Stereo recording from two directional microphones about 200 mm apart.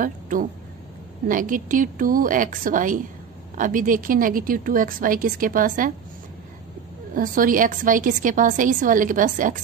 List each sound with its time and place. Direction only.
0.0 s a woman's voice: 40° right (ahead or behind)
7.2 s a woman's voice: 45° right (ahead or behind)